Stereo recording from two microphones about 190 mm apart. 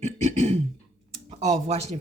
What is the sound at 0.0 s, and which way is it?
Beatboxing, 35° right (ahead or behind).